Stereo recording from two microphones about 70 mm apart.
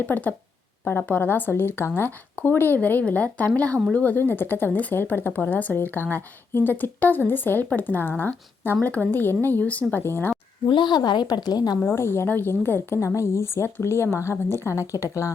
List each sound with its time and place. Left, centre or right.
0.0 s a woman's voice: left
9.9 s a woman's voice: left
10.8 s a woman's voice: left
11.9 s a woman's voice: left